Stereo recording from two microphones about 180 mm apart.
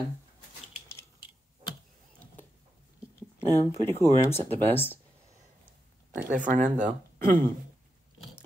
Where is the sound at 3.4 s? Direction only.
15° left (ahead or behind).